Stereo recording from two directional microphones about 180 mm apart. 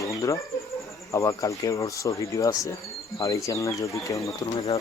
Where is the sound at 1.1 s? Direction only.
15° left (ahead or behind).